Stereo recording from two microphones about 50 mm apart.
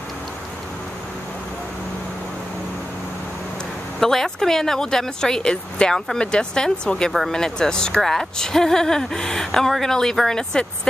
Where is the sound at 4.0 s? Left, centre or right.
Centre.